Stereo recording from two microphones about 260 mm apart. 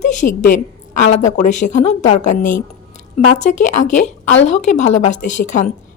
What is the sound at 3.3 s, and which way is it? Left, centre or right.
Speech, left.